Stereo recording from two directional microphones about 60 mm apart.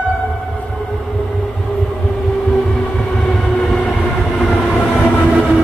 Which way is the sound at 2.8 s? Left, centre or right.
Centre.